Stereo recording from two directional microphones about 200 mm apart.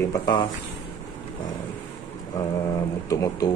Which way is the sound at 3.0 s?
15° left (ahead or behind).